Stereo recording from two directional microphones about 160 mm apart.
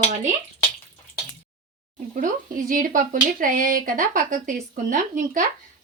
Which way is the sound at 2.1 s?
55° right (ahead or behind).